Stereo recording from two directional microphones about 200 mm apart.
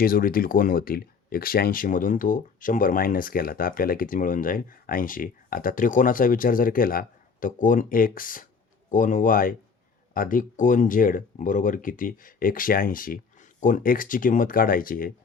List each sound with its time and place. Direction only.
0.0 s speech: 45° left (ahead or behind)